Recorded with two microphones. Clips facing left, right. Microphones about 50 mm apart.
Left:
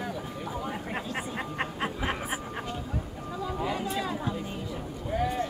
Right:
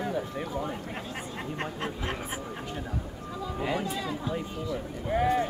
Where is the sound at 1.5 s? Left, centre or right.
Centre.